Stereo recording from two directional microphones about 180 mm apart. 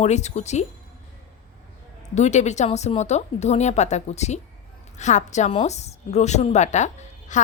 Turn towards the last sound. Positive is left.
turn(degrees=40)  # may be behind; listen again after turning